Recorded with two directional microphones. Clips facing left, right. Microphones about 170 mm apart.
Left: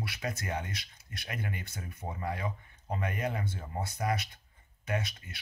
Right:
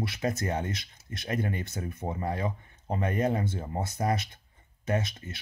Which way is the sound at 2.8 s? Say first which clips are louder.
Right 6 dB; 30° right (ahead or behind).